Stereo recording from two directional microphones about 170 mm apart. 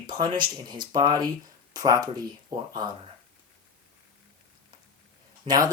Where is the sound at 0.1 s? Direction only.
25° right (ahead or behind).